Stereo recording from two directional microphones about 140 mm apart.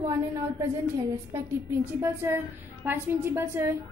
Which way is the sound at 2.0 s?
15° right (ahead or behind).